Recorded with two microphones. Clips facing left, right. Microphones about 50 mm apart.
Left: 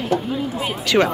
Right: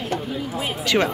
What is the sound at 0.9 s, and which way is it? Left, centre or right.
Speech, right.